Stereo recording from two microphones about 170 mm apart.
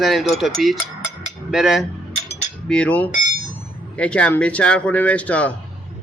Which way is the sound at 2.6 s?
5° left (ahead or behind).